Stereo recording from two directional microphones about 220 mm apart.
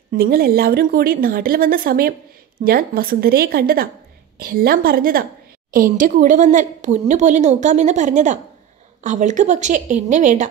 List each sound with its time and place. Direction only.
0.1 s a woman's voice: 45° right (ahead or behind)